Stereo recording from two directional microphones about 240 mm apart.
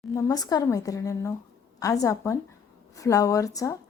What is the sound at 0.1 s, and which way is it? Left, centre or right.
A woman's voice, centre.